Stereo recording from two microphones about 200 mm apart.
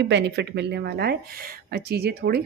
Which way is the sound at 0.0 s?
60° right (ahead or behind).